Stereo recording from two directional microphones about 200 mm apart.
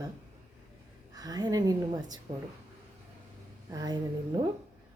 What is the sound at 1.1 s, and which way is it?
A woman's voice, 20° right (ahead or behind).